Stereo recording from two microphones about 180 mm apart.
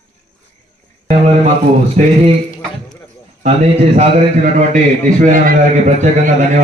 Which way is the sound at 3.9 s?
45° right (ahead or behind).